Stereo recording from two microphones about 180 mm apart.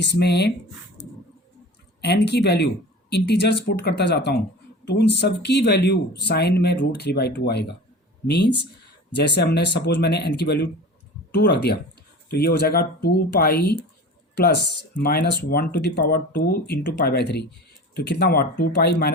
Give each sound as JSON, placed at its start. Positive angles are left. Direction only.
{"t": 0.0, "sound": "speech", "side_deg": 70}
{"t": 2.0, "sound": "speech", "side_deg": 70}